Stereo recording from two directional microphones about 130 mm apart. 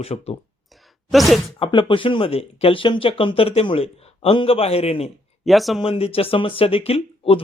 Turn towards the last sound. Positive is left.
turn(degrees=50)  # may be behind; listen again after turning